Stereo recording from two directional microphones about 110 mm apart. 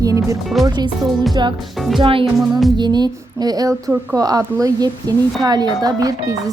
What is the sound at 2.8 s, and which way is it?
Speech, 40° right (ahead or behind).